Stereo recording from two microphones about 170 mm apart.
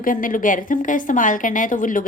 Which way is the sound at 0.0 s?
55° left (ahead or behind).